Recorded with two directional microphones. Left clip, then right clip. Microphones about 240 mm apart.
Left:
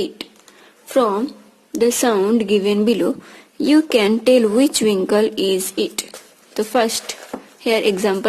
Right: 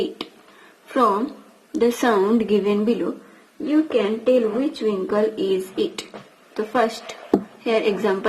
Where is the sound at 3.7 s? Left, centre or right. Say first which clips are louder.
Left 5 dB; left.